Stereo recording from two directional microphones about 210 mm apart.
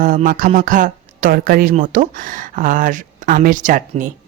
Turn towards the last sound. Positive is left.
turn(degrees=-40)  # may be behind; listen again after turning